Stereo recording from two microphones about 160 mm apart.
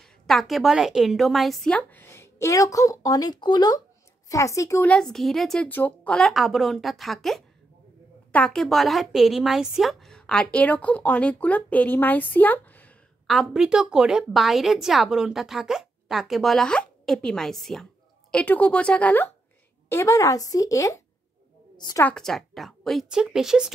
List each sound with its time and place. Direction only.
0.0 s a woman's voice: centre (ahead or behind); by 4.8 s 20° left (ahead or behind)
4.8 s a woman's voice: 5° left (ahead or behind)
13.3 s a woman's voice: centre (ahead or behind); by 22.0 s 25° left (ahead or behind)
22.0 s a woman's voice: 5° left (ahead or behind)